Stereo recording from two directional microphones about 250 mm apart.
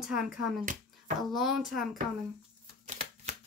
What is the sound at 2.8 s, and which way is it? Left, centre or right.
Shuffling cards, right.